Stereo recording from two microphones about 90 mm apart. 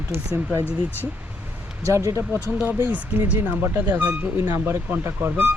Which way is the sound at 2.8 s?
20° right (ahead or behind).